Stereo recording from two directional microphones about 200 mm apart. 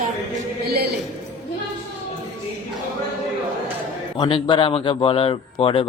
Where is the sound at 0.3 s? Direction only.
50° right (ahead or behind).